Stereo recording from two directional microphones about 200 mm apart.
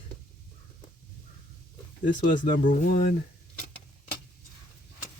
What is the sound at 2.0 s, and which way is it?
Speech, 40° left (ahead or behind).